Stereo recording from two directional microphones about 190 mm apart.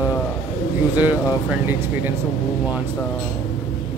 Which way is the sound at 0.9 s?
10° right (ahead or behind).